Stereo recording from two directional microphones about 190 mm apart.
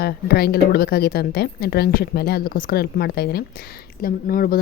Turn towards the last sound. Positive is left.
turn(degrees=50)  # may be behind; listen again after turning